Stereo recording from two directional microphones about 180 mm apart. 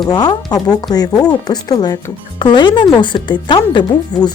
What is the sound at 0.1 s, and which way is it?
Speech, 20° left (ahead or behind).